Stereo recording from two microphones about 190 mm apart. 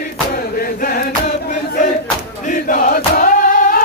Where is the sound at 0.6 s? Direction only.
50° left (ahead or behind).